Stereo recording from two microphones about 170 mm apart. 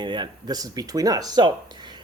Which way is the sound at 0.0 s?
25° right (ahead or behind).